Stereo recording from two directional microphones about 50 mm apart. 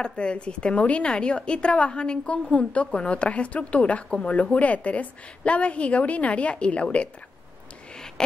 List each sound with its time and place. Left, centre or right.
0.0 s a woman's voice: centre